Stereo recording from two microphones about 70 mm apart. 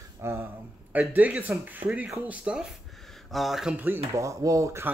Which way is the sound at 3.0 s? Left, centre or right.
Centre.